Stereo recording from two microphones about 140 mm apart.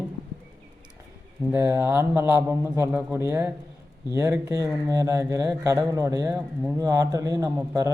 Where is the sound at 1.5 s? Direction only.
20° right (ahead or behind).